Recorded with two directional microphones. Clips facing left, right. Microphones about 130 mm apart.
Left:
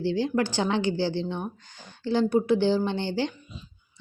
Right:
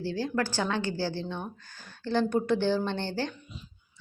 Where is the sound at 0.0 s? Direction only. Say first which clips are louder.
Left 5 dB; 20° left (ahead or behind).